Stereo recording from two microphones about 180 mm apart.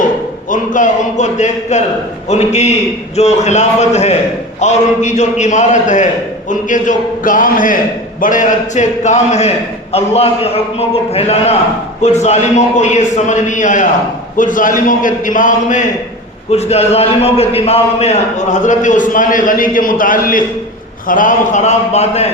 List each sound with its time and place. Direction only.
0.5 s a man's voice: 45° left (ahead or behind)